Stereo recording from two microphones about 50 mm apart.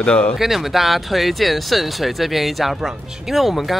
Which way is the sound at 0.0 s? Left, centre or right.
Centre.